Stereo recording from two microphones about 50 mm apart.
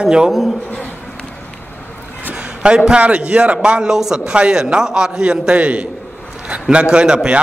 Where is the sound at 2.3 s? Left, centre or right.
Right.